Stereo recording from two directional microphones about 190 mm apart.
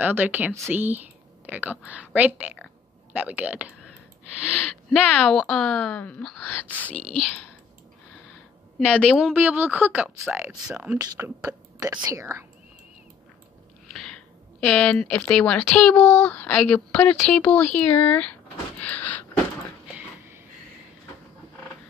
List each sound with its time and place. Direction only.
0.0 s a woman's voice: 10° right (ahead or behind)
4.8 s speech: 5° left (ahead or behind)
8.7 s speech: 5° left (ahead or behind); by 12.4 s 15° right (ahead or behind)
13.9 s speech: 5° left (ahead or behind)
18.8 s a sound: 10° left (ahead or behind)